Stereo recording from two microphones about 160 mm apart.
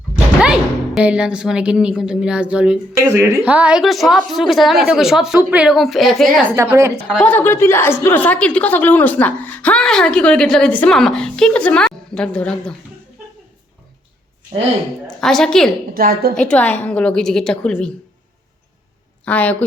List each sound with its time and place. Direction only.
0.4 s speech: 5° right (ahead or behind)
6.6 s a woman's voice: 20° right (ahead or behind)
7.2 s a woman's voice: 10° left (ahead or behind)
15.0 s a woman's voice: 5° left (ahead or behind)
16.0 s a woman's voice: 65° right (ahead or behind)
16.3 s speech: 5° left (ahead or behind)
19.2 s a woman's voice: 10° left (ahead or behind)